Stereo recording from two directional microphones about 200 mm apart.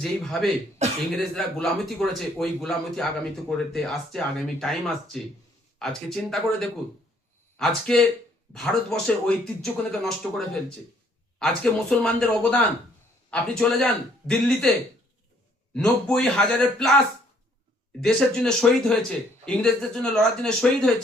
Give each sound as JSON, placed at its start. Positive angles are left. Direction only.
{"t": 0.0, "sound": "speech", "side_deg": 0}
{"t": 0.8, "sound": "throat clearing", "side_deg": -35}
{"t": 1.1, "sound": "speech", "side_deg": 0}
{"t": 15.7, "sound": "speech", "side_deg": 5}
{"t": 18.0, "sound": "speech", "side_deg": 0}